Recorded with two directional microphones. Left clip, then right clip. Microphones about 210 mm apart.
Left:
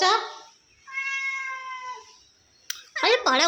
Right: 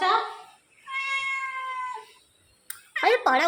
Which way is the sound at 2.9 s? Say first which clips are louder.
Even; 5° left (ahead or behind).